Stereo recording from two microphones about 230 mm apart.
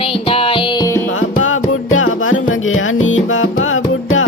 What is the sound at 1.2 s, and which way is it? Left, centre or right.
Music, left.